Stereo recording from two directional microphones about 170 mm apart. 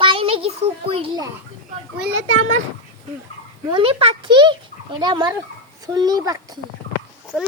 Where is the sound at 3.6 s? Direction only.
30° right (ahead or behind).